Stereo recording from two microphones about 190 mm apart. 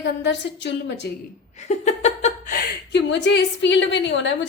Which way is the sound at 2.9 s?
65° left (ahead or behind).